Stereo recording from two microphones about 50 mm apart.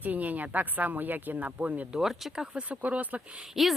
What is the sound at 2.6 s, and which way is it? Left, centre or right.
Speech, right.